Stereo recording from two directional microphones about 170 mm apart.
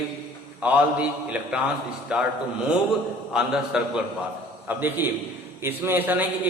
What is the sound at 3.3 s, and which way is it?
A man's voice, 5° right (ahead or behind).